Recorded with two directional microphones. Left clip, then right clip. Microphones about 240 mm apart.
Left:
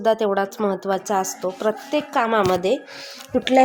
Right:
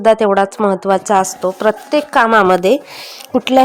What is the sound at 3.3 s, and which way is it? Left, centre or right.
Speech, centre.